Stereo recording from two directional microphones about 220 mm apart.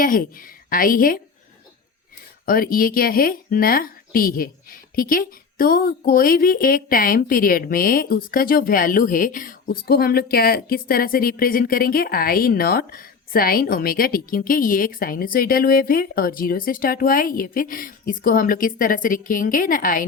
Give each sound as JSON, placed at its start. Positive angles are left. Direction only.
{"t": 0.0, "sound": "a woman's voice", "side_deg": 40}
{"t": 2.5, "sound": "a woman's voice", "side_deg": 40}